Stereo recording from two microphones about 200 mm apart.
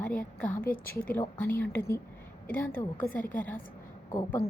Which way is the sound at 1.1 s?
10° left (ahead or behind).